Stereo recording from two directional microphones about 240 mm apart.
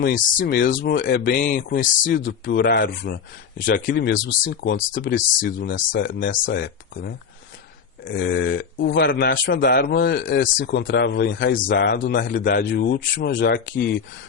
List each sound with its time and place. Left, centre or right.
0.0 s speech: left
2.4 s speech: left